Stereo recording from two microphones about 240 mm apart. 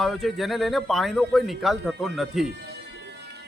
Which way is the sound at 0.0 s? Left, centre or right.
Centre.